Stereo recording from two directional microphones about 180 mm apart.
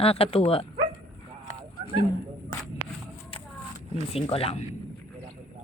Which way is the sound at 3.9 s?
35° left (ahead or behind).